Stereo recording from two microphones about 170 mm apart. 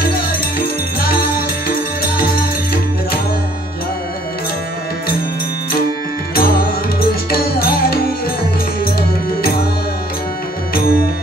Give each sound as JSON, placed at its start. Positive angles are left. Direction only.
{"t": 0.0, "sound": "music", "side_deg": 60}
{"t": 6.3, "sound": "music", "side_deg": 60}
{"t": 10.7, "sound": "music", "side_deg": 60}